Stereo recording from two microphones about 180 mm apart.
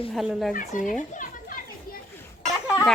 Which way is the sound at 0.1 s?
Centre (ahead or behind).